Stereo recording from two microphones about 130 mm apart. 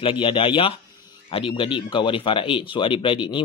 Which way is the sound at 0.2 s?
45° left (ahead or behind).